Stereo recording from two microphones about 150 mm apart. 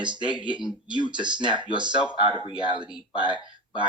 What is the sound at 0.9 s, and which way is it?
Speech, 30° right (ahead or behind).